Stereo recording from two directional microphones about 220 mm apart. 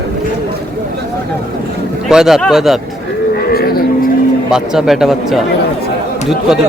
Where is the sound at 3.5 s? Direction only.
45° left (ahead or behind).